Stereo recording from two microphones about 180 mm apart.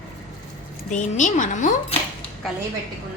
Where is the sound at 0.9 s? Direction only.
45° left (ahead or behind).